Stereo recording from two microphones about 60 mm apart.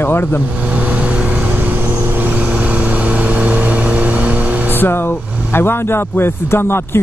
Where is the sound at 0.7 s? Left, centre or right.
Right.